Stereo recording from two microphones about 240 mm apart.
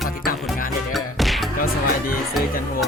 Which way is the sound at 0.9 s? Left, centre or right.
Centre.